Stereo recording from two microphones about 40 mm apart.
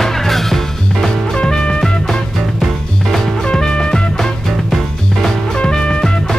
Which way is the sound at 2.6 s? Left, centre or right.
Centre.